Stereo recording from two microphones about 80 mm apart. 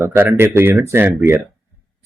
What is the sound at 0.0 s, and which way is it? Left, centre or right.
Speech, right.